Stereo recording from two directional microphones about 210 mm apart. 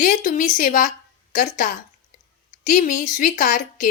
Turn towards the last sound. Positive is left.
turn(degrees=40)  # may be behind; listen again after turning